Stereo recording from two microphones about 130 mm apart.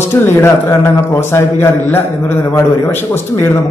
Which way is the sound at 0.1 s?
20° left (ahead or behind).